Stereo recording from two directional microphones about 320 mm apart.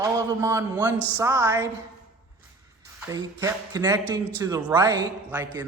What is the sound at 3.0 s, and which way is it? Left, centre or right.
A woman's voice, centre.